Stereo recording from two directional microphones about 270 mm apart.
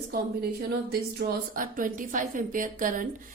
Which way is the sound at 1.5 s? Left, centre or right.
Right.